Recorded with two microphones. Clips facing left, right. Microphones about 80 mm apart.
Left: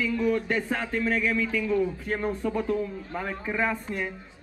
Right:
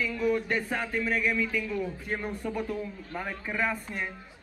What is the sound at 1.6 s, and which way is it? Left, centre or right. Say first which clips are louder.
Speech: left 7 dB; centre.